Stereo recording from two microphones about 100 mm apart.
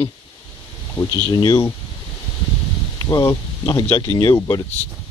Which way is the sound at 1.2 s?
45° left (ahead or behind).